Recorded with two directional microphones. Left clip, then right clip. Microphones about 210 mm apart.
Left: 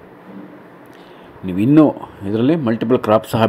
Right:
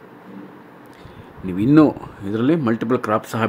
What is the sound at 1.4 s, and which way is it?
A man's voice, 5° left (ahead or behind).